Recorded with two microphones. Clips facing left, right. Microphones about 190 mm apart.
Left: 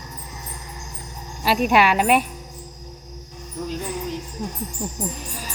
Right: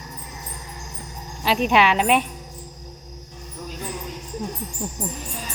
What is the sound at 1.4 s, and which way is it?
Speech, 10° left (ahead or behind).